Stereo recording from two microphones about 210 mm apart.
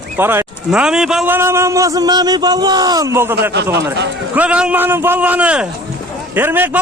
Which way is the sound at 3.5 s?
55° right (ahead or behind).